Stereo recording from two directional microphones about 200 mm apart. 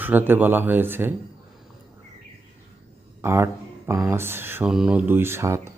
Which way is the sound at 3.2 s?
10° right (ahead or behind).